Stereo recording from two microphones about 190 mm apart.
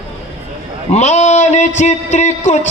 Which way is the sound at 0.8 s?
35° left (ahead or behind).